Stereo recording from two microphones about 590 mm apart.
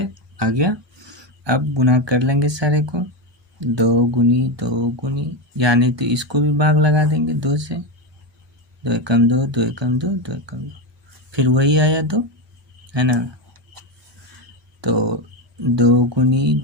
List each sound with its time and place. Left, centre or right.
0.0 s speech: right
8.8 s speech: right
14.8 s speech: right